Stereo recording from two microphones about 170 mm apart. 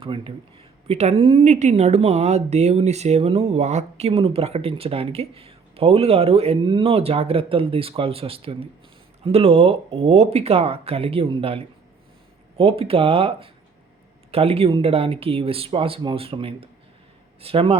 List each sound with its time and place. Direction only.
0.0 s speech: 30° right (ahead or behind)